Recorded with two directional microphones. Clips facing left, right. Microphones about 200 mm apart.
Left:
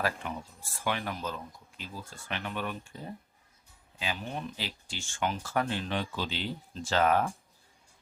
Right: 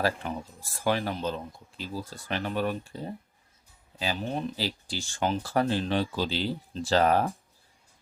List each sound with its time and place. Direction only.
0.0 s speech: 35° right (ahead or behind)